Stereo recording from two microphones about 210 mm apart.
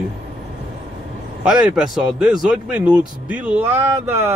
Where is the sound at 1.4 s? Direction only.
5° right (ahead or behind).